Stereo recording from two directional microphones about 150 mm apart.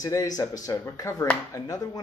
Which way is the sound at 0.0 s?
25° left (ahead or behind).